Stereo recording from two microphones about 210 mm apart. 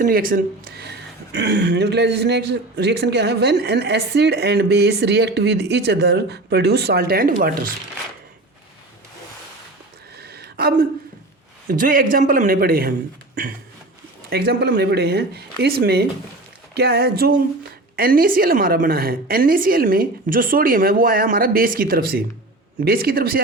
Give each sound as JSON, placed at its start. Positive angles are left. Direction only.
{"t": 0.0, "sound": "speech", "side_deg": -45}
{"t": 10.2, "sound": "a sound", "side_deg": -50}
{"t": 11.7, "sound": "speech", "side_deg": -40}
{"t": 14.3, "sound": "speech", "side_deg": -50}